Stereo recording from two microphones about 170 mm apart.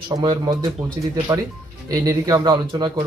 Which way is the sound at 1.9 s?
20° right (ahead or behind).